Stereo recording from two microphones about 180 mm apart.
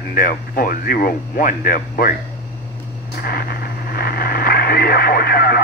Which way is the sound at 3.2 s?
60° left (ahead or behind).